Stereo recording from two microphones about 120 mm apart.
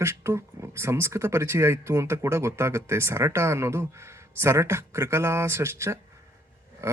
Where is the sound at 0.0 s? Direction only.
25° right (ahead or behind).